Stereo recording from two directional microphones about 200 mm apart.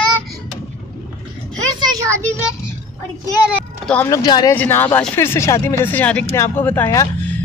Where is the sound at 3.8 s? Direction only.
10° left (ahead or behind).